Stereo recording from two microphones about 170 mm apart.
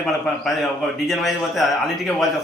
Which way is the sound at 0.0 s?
Centre (ahead or behind).